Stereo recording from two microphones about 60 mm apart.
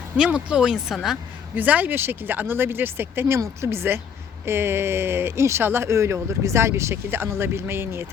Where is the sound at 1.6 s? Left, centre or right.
Right.